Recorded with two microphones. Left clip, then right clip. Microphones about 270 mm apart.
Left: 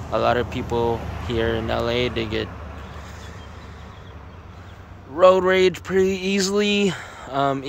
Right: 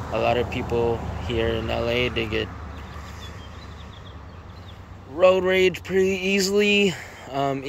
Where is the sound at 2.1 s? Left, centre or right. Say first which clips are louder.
Even; centre.